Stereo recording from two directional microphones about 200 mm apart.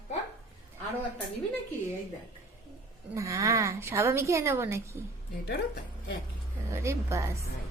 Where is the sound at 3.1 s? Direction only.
15° right (ahead or behind).